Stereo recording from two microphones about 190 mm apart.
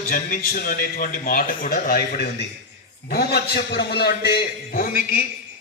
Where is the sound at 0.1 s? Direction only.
50° left (ahead or behind).